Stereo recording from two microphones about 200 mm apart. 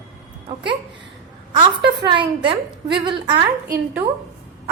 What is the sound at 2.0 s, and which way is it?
A woman's voice, 25° right (ahead or behind).